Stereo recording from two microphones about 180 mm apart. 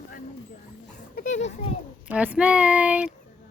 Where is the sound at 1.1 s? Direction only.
45° left (ahead or behind).